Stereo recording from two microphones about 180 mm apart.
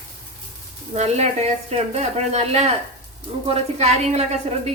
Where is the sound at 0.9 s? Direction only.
35° right (ahead or behind).